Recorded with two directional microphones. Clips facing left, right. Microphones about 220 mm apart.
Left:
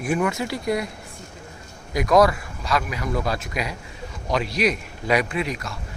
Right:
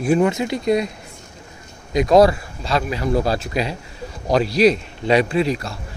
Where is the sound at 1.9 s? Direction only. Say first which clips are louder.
Right 4 dB; 25° right (ahead or behind).